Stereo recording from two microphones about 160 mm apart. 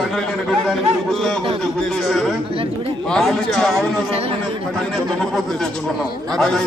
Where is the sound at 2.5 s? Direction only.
35° right (ahead or behind).